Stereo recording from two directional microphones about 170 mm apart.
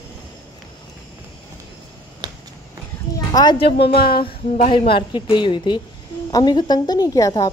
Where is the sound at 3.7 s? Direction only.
75° left (ahead or behind).